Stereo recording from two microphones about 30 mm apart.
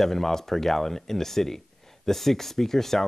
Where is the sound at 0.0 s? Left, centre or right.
Centre.